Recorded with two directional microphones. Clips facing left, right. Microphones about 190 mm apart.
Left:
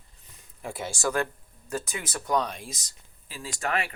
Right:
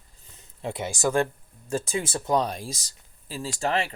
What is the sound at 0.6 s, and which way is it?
Speech, 20° right (ahead or behind).